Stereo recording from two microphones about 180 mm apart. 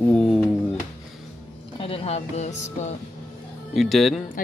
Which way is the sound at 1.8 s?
30° left (ahead or behind).